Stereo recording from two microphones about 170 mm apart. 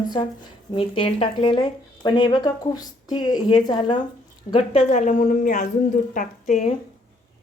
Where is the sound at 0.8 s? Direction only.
30° left (ahead or behind); by 5.6 s 50° left (ahead or behind).